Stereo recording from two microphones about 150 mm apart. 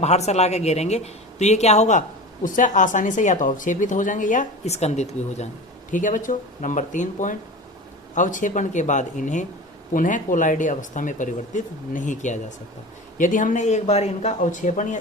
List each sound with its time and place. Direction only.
0.0 s speech: 45° left (ahead or behind)
5.9 s speech: 60° left (ahead or behind)